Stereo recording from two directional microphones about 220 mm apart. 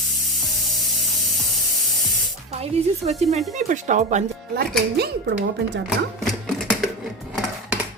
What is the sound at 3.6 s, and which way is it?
Speech, 35° right (ahead or behind).